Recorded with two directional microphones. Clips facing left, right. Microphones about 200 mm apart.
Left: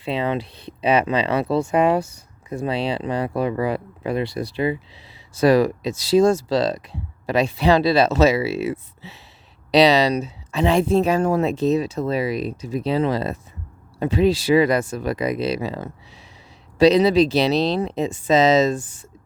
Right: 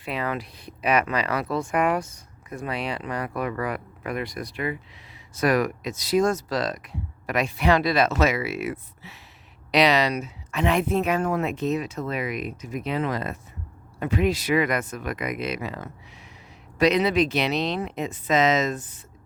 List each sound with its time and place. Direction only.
0.0 s speech: 30° left (ahead or behind)
18.8 s speech: 10° left (ahead or behind)